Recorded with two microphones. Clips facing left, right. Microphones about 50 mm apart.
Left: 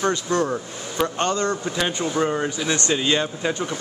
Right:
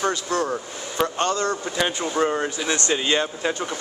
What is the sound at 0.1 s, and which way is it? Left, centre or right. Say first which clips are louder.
Speech: left 2 dB; left.